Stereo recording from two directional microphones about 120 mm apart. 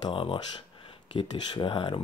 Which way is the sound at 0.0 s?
45° left (ahead or behind).